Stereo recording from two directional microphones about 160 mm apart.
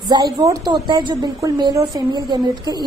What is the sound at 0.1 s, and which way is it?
A woman's voice, 20° right (ahead or behind).